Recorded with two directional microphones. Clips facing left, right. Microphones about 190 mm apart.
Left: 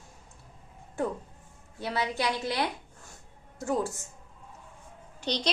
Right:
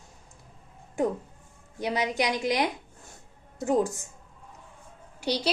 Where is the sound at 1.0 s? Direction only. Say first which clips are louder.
Right 4 dB; 15° right (ahead or behind).